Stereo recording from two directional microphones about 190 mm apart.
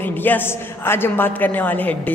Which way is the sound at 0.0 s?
10° left (ahead or behind).